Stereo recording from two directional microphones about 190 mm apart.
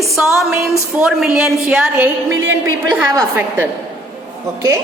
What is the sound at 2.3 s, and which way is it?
Speech, 90° right.